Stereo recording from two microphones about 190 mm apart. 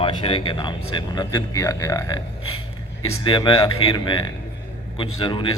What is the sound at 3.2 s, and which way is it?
Speech, 25° left (ahead or behind).